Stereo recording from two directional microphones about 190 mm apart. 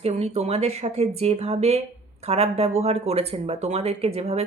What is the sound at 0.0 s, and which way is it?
Speech, 35° right (ahead or behind).